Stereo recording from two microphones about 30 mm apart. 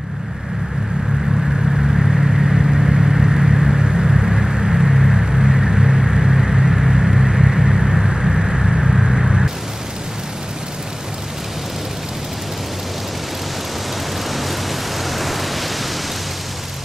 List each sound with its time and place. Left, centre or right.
1.9 s vehicle: centre
4.1 s a sound: right
6.9 s vehicle: centre
15.0 s pink noise: centre